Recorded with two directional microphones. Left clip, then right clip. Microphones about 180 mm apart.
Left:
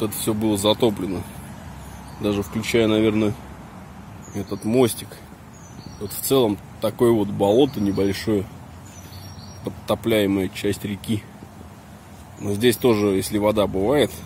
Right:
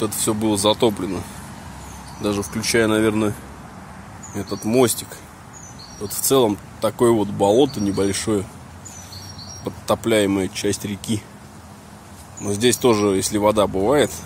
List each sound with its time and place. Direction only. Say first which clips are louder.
0.0 s speech: right 2 dB; 5° left (ahead or behind)
2.2 s speech: right 1 dB; 20° left (ahead or behind)
4.4 s speech: right 2 dB; centre (ahead or behind)
6.0 s speech: right 2 dB; centre (ahead or behind)
9.7 s speech: right 2 dB; centre (ahead or behind)
12.4 s speech: right 1 dB; 5° left (ahead or behind)